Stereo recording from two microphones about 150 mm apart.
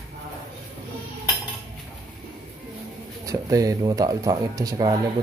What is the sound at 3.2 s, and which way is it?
Speech, 25° right (ahead or behind).